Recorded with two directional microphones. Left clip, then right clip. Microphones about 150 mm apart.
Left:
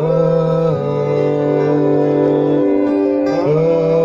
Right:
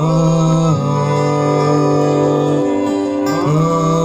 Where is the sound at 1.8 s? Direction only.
35° left (ahead or behind).